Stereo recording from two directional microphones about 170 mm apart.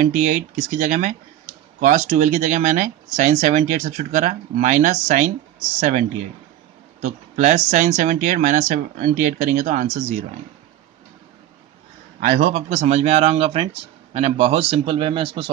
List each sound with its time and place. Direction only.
0.0 s speech: 50° right (ahead or behind)
12.3 s speech: 45° right (ahead or behind)